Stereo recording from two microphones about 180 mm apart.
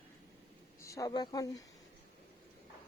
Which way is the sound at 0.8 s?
15° left (ahead or behind).